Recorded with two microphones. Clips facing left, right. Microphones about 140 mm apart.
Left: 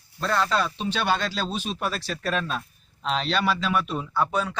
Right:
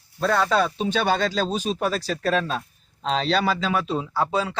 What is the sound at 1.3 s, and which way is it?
Speech, 40° right (ahead or behind).